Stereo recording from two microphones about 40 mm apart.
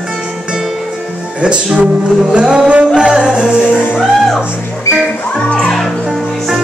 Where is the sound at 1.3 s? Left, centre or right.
Right.